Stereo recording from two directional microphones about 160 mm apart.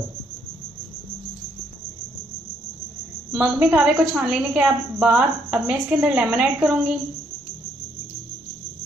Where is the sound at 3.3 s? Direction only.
10° right (ahead or behind).